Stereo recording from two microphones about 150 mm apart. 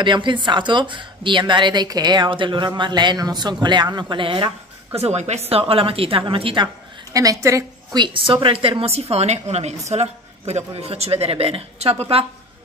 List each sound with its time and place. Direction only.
0.0 s speech: 30° right (ahead or behind)
4.9 s speech: 45° right (ahead or behind)
7.2 s a man's voice: 20° right (ahead or behind); by 12.3 s 40° right (ahead or behind)